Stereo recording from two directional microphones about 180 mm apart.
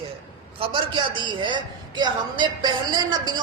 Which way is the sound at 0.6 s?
25° right (ahead or behind).